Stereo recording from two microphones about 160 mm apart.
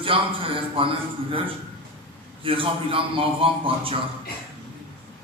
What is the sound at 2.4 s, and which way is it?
A man's voice, 35° right (ahead or behind).